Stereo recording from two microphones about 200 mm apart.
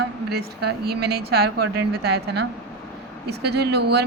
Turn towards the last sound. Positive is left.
turn(degrees=-55)  # may be behind; listen again after turning